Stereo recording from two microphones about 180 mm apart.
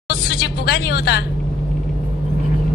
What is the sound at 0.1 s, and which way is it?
A woman's voice, 60° left (ahead or behind).